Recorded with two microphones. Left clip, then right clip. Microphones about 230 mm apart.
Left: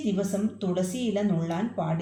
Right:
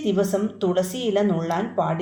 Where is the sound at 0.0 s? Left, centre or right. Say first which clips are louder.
Right 7 dB; right.